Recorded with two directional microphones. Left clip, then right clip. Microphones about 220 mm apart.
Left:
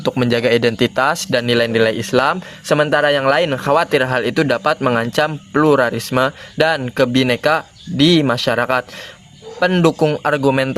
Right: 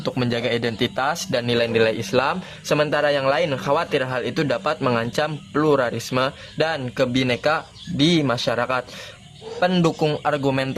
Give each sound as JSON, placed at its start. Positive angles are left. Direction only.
{"t": 0.0, "sound": "speech", "side_deg": 25}